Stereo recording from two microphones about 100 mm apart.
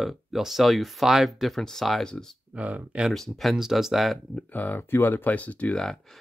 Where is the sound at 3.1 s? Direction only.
Centre (ahead or behind).